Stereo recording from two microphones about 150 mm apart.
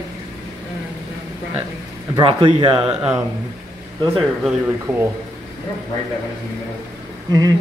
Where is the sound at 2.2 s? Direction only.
35° right (ahead or behind).